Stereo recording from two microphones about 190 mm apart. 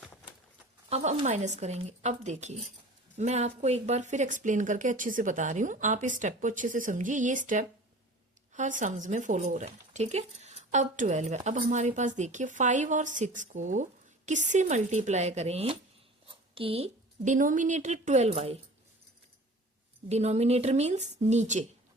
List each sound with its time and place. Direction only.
0.9 s speech: 35° right (ahead or behind)
20.1 s speech: 35° right (ahead or behind)